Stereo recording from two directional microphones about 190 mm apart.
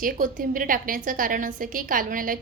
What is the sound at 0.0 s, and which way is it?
A woman's voice, 45° right (ahead or behind).